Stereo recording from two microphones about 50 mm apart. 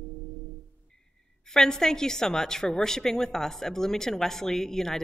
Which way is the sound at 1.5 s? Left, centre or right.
Centre.